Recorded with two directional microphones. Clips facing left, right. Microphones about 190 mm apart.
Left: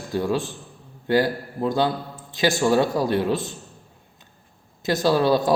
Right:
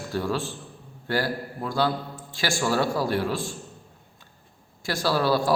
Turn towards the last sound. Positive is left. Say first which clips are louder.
# left 4 dB
turn(degrees=20)  # may be behind; listen again after turning